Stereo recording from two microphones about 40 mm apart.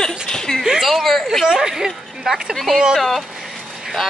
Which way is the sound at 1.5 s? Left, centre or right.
Centre.